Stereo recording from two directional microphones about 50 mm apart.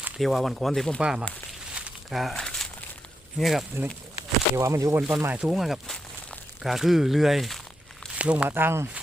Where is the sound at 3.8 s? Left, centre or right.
Right.